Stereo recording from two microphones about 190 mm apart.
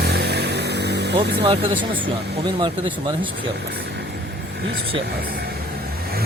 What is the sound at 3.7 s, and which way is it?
Vehicle, 60° right (ahead or behind).